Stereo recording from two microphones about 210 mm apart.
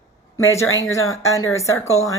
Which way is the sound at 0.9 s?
15° left (ahead or behind).